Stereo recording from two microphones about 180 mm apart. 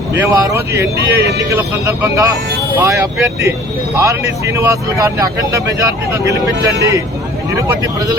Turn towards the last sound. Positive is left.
turn(degrees=-15)  # may be behind; listen again after turning